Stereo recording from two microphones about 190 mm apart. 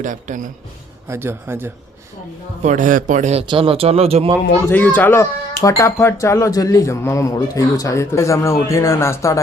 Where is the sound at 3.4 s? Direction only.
25° right (ahead or behind).